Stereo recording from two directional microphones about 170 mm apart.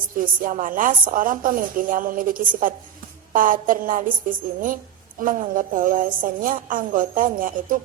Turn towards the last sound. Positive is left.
turn(degrees=-55)  # may be behind; listen again after turning